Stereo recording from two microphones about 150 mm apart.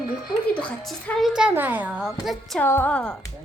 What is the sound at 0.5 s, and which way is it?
A child's voice, 5° left (ahead or behind).